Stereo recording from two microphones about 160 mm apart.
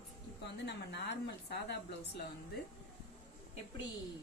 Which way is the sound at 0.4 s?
90° left.